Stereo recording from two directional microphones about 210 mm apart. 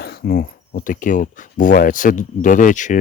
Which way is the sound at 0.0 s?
50° left (ahead or behind).